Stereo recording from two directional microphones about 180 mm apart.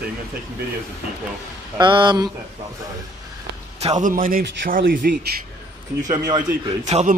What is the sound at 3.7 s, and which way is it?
Speech, 40° right (ahead or behind).